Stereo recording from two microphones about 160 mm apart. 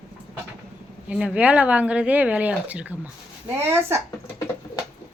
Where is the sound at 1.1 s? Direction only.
5° right (ahead or behind).